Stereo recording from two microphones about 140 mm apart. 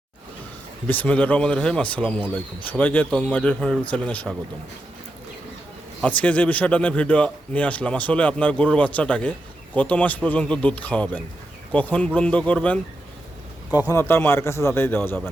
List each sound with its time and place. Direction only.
0.9 s speech: 10° left (ahead or behind)
6.0 s speech: 10° left (ahead or behind)
13.8 s speech: 20° left (ahead or behind)